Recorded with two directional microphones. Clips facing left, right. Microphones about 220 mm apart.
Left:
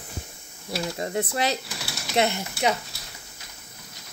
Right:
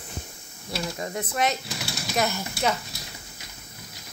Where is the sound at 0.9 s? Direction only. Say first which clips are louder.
Left 3 dB; 30° left (ahead or behind).